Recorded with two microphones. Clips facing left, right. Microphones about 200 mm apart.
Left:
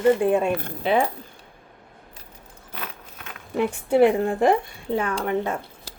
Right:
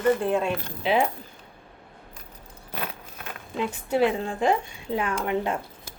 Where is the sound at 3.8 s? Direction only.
55° left (ahead or behind).